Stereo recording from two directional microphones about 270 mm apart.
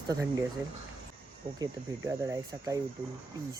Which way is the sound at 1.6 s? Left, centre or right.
Centre.